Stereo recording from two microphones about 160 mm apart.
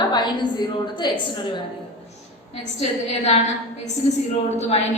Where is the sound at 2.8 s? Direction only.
40° left (ahead or behind).